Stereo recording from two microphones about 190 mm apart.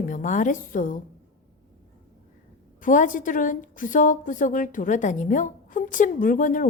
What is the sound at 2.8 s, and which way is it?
A woman's voice, 45° left (ahead or behind).